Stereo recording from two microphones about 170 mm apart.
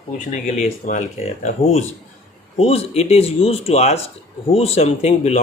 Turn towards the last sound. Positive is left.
turn(degrees=40)  # may be behind; listen again after turning